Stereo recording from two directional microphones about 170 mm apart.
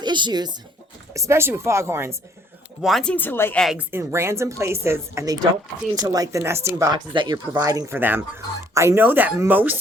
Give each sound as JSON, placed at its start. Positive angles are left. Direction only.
{"t": 0.0, "sound": "speech", "side_deg": -25}
{"t": 2.8, "sound": "speech", "side_deg": 5}
{"t": 3.6, "sound": "a woman's voice", "side_deg": 0}
{"t": 3.9, "sound": "speech", "side_deg": -15}